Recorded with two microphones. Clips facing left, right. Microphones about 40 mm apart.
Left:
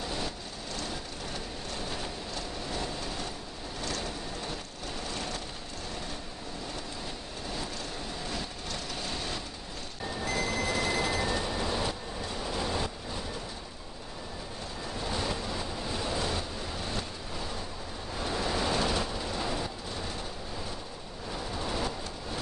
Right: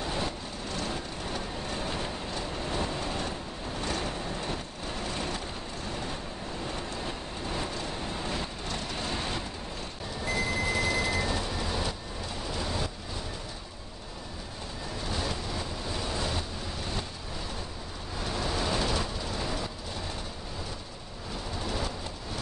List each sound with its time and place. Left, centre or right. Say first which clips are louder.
2.7 s train: right 4 dB; right
5.1 s vehicle: right 2 dB; right
9.1 s vehicle: right 3 dB; right
10.2 s music: right 2 dB; centre
11.2 s a sound: left 1 dB; centre
12.4 s vehicle: left 1 dB; centre
15.1 s vehicle: even; centre
18.2 s vehicle: left 1 dB; centre
21.6 s a sound: even; centre